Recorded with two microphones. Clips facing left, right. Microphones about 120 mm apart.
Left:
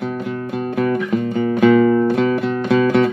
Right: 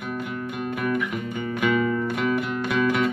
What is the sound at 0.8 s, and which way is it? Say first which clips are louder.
Music: left 9 dB; 35° left (ahead or behind).